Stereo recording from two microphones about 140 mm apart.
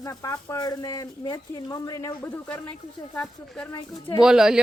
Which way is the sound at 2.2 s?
10° left (ahead or behind).